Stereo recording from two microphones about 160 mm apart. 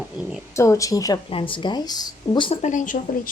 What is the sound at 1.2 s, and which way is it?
Speech, 35° left (ahead or behind).